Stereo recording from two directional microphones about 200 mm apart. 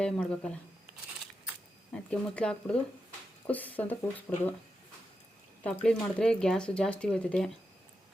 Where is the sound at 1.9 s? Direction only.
5° left (ahead or behind).